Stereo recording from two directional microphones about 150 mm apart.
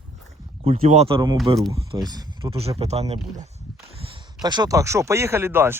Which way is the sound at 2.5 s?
40° right (ahead or behind).